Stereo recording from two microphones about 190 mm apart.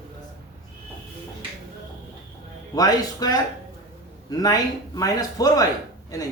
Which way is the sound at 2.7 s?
20° left (ahead or behind).